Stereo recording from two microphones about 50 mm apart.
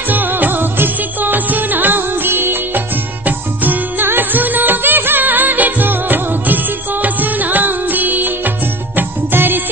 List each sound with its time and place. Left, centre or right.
0.1 s music: right